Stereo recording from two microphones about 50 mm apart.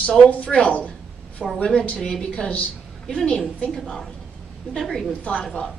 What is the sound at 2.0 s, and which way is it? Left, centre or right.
Speech, centre.